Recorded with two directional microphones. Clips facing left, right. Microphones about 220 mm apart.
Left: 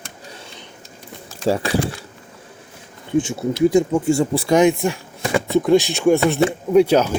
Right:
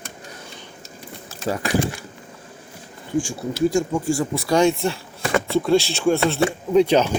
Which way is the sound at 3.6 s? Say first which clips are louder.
Left 4 dB; 20° left (ahead or behind).